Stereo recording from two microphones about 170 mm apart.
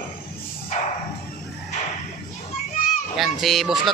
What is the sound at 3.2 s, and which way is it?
Speech, centre (ahead or behind).